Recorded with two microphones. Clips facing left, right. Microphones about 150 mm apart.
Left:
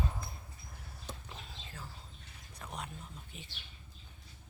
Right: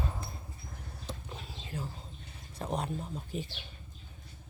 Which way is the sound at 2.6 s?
35° right (ahead or behind).